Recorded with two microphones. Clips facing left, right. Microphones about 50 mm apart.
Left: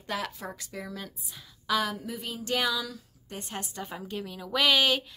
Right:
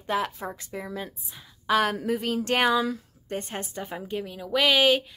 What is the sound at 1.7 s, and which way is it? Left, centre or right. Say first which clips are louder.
Speech: right 5 dB; right.